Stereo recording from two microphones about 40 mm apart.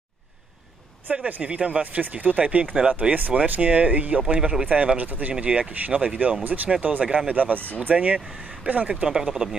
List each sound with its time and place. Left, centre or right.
1.4 s speech: right
4.2 s speech: right
5.4 s speech: right
6.4 s speech: right
7.9 s speech: right
9.0 s speech: centre